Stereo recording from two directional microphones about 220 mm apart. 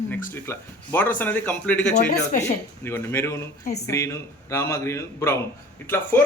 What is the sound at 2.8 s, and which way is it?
A man's voice, 10° left (ahead or behind).